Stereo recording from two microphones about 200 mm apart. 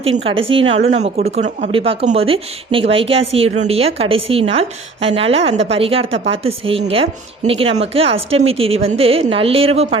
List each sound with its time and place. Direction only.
0.0 s a woman's voice: 30° right (ahead or behind)